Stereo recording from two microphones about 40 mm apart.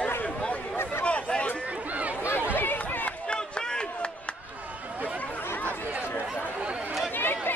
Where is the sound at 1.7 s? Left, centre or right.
Right.